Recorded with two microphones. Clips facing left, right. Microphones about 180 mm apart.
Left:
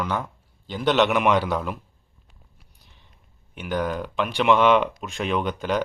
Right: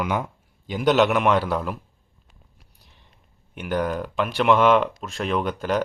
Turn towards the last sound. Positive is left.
turn(degrees=-5)  # may be behind; listen again after turning